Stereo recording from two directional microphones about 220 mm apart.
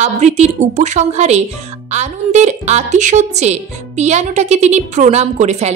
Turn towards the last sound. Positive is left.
turn(degrees=-30)  # may be behind; listen again after turning